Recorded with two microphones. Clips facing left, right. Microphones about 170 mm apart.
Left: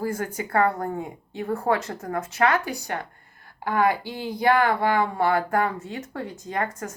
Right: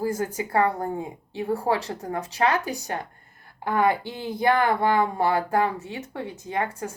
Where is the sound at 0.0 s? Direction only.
15° right (ahead or behind).